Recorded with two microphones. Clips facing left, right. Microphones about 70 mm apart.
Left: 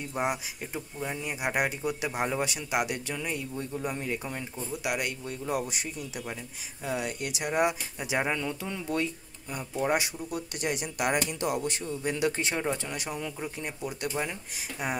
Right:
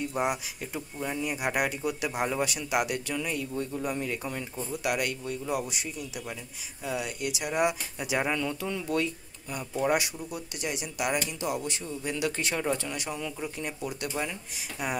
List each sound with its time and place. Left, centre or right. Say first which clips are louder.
0.1 s speech: right 1 dB; left
5.5 s speech: left 2 dB; left
10.3 s speech: left 4 dB; left